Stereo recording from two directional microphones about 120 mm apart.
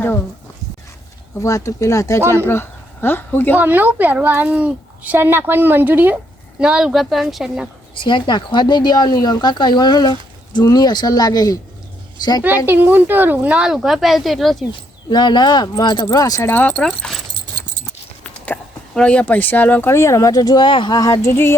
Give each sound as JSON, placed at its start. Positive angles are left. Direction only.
{"t": 1.4, "sound": "speech", "side_deg": 25}
{"t": 3.6, "sound": "a child's voice", "side_deg": -15}
{"t": 6.6, "sound": "speech", "side_deg": -5}
{"t": 7.9, "sound": "speech", "side_deg": 40}
{"t": 12.6, "sound": "a child's voice", "side_deg": -15}
{"t": 15.1, "sound": "speech", "side_deg": 40}
{"t": 16.5, "sound": "speech", "side_deg": 15}